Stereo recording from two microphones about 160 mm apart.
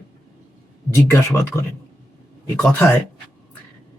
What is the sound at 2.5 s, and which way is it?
Speech, 10° left (ahead or behind).